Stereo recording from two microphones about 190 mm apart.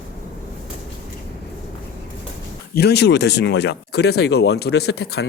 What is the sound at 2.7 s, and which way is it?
Speech, 60° left (ahead or behind).